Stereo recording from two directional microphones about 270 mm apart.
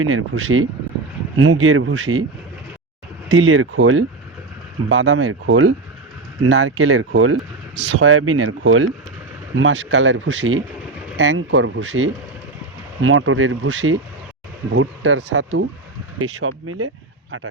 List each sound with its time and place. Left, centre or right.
0.0 s speech: right
3.2 s speech: right